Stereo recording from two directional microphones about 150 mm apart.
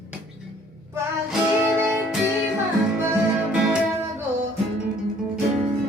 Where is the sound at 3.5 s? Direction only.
5° right (ahead or behind).